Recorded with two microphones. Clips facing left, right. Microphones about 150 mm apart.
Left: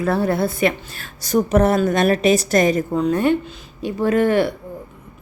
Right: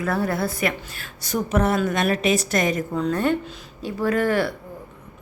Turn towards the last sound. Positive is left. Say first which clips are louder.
# left 4 dB
turn(degrees=20)  # may be behind; listen again after turning